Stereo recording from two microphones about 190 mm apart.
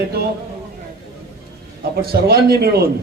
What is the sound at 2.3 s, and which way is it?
Speech, 55° right (ahead or behind).